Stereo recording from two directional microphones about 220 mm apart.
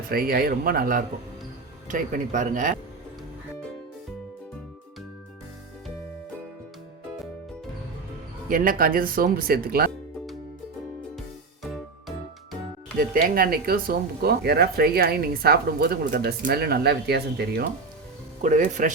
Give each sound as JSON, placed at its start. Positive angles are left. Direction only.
{"t": 0.1, "sound": "speech", "side_deg": -40}
{"t": 8.4, "sound": "speech", "side_deg": -40}
{"t": 11.6, "sound": "music", "side_deg": 0}
{"t": 13.0, "sound": "speech", "side_deg": -40}
{"t": 18.4, "sound": "speech", "side_deg": -35}